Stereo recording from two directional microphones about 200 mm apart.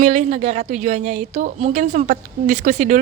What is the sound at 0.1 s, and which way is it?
A woman's voice, 35° right (ahead or behind).